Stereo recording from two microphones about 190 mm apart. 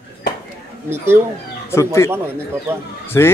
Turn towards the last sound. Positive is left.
turn(degrees=15)  # may be behind; listen again after turning